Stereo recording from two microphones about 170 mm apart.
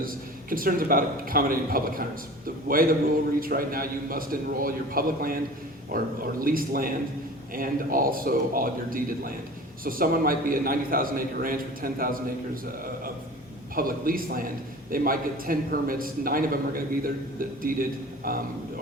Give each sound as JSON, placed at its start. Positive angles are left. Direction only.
{"t": 0.5, "sound": "a man's voice", "side_deg": -55}
{"t": 13.7, "sound": "a man's voice", "side_deg": -55}